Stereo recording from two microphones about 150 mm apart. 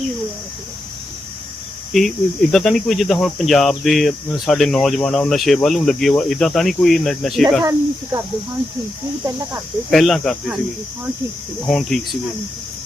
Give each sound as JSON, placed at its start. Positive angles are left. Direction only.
{"t": 1.9, "sound": "speech", "side_deg": 0}
{"t": 7.6, "sound": "speech", "side_deg": -25}
{"t": 9.5, "sound": "speech", "side_deg": 0}
{"t": 11.6, "sound": "speech", "side_deg": 0}